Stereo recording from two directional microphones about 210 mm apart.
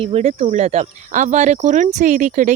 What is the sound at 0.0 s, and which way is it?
Speech, 30° right (ahead or behind).